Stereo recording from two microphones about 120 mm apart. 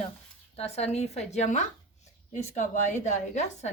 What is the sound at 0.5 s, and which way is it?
A woman's voice, 60° left (ahead or behind).